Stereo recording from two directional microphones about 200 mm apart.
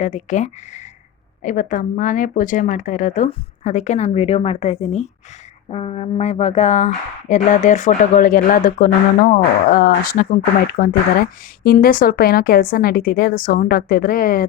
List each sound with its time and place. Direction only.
0.0 s a woman's voice: 35° left (ahead or behind)